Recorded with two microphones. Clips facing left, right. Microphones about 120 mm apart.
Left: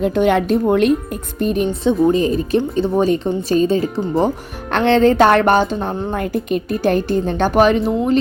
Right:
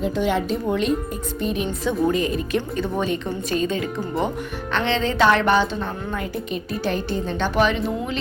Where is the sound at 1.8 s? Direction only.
30° left (ahead or behind).